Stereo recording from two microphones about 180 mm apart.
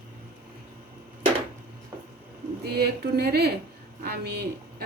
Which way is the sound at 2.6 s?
60° right (ahead or behind).